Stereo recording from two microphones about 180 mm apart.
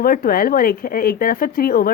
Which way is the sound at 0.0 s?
55° left (ahead or behind).